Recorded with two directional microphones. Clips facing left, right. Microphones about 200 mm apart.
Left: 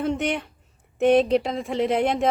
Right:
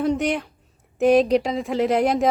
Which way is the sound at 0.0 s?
Centre (ahead or behind).